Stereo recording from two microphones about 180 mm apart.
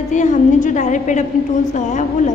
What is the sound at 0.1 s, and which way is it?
A woman's voice, 45° left (ahead or behind).